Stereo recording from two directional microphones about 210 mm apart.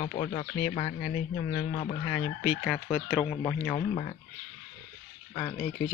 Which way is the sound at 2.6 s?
5° left (ahead or behind).